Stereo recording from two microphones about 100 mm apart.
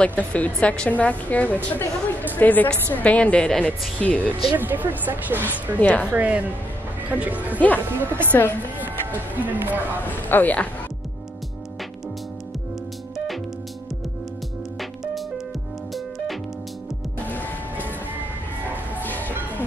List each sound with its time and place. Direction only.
0.0 s a woman's voice: 15° left (ahead or behind)
4.6 s a woman's voice: 20° right (ahead or behind)
5.8 s a woman's voice: 15° left (ahead or behind)
6.1 s a woman's voice: 15° right (ahead or behind)
8.3 s a woman's voice: 20° left (ahead or behind)
8.8 s speech: 20° right (ahead or behind)
10.0 s a woman's voice: 20° left (ahead or behind)
14.8 s music: centre (ahead or behind)
19.0 s music: 20° left (ahead or behind)